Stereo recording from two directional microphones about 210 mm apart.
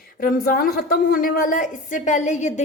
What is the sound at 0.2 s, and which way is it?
A woman's voice, 45° left (ahead or behind).